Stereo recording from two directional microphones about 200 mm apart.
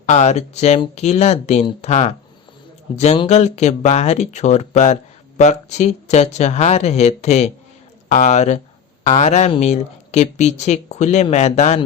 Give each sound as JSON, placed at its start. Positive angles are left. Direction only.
{"t": 0.0, "sound": "speech", "side_deg": 35}